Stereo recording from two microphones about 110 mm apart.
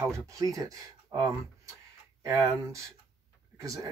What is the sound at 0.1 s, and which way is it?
Speech, 30° right (ahead or behind).